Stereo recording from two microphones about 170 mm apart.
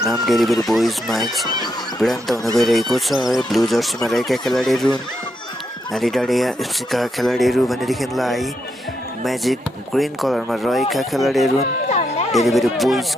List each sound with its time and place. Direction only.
0.0 s speech: centre (ahead or behind)
5.9 s speech: centre (ahead or behind)
11.9 s music: 40° left (ahead or behind)
12.3 s speech: centre (ahead or behind)